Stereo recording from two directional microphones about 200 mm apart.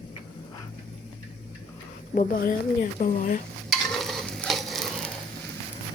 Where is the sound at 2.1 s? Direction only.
45° left (ahead or behind).